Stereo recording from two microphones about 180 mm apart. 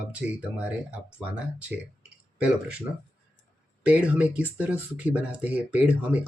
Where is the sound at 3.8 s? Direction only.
5° right (ahead or behind).